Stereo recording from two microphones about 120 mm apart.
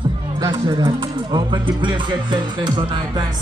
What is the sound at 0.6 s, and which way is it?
Speech, 35° right (ahead or behind).